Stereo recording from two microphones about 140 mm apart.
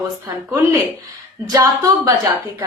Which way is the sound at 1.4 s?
25° right (ahead or behind).